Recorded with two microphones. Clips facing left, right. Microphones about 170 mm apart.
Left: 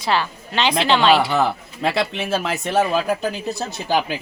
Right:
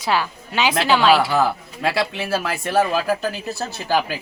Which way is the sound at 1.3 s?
20° left (ahead or behind).